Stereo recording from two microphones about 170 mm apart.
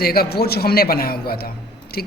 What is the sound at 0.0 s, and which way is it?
A woman's voice, 65° left (ahead or behind).